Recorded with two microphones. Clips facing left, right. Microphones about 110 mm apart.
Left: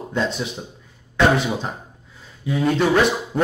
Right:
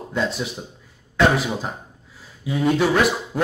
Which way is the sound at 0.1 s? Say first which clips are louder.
Left 1 dB; centre (ahead or behind).